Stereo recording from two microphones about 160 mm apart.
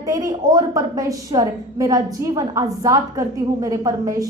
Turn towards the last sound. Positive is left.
turn(degrees=-20)  # may be behind; listen again after turning